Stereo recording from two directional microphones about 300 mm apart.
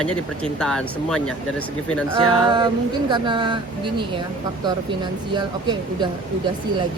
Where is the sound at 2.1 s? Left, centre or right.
Centre.